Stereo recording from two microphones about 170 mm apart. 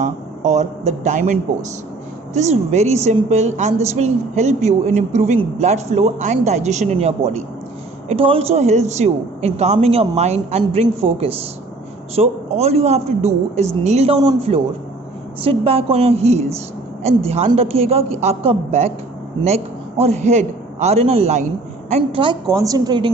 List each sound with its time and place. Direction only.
0.0 s a man's voice: 45° right (ahead or behind)
22.2 s a woman's voice: 25° right (ahead or behind)